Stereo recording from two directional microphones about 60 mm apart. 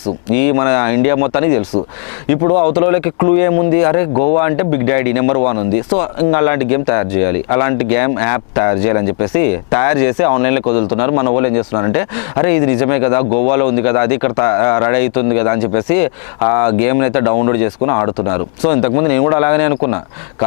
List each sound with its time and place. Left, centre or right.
0.3 s speech: left